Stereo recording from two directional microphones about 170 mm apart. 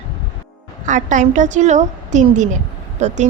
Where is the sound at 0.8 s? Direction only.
45° right (ahead or behind).